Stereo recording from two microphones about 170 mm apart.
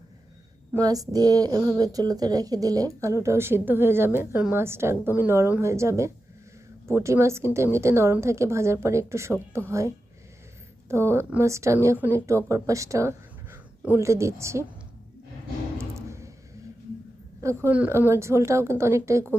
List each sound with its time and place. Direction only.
0.7 s speech: 20° right (ahead or behind)
15.8 s a sound: 15° right (ahead or behind)
17.4 s speech: 15° right (ahead or behind)